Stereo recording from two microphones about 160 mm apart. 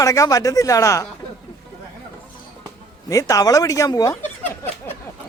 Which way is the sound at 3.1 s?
20° left (ahead or behind).